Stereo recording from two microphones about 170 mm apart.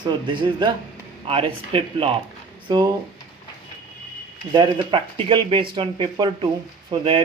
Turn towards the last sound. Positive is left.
turn(degrees=-30)  # may be behind; listen again after turning